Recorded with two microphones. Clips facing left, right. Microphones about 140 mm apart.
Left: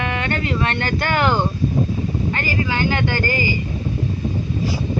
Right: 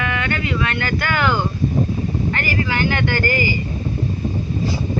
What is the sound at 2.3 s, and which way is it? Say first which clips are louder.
Speech: even; 20° left (ahead or behind).